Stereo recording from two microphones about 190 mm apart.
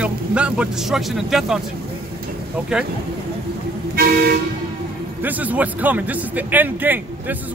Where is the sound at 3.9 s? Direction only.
50° right (ahead or behind).